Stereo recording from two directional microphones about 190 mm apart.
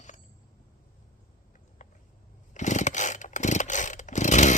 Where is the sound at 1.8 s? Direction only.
40° left (ahead or behind).